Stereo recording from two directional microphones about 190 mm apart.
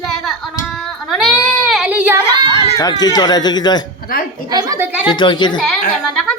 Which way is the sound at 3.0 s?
20° left (ahead or behind).